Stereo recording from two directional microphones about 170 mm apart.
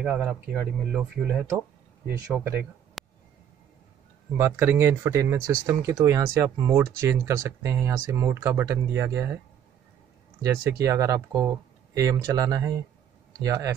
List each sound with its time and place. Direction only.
0.0 s speech: 5° right (ahead or behind)
3.0 s a sound: centre (ahead or behind)
4.4 s speech: 15° right (ahead or behind)
10.4 s speech: 15° right (ahead or behind)